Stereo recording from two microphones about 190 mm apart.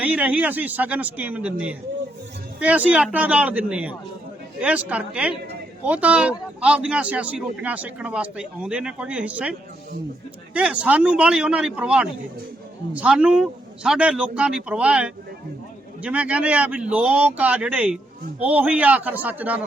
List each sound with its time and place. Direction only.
0.0 s a man's voice: 5° right (ahead or behind)